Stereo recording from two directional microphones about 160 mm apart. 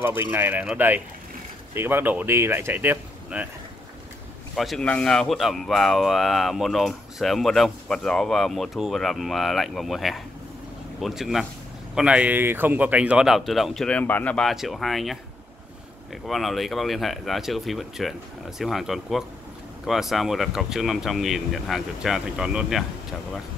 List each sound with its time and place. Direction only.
0.0 s speech: 15° right (ahead or behind)
4.6 s speech: centre (ahead or behind)
16.3 s speech: centre (ahead or behind)